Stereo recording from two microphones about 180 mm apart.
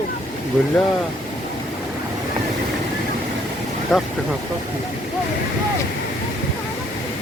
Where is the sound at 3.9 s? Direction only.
Centre (ahead or behind).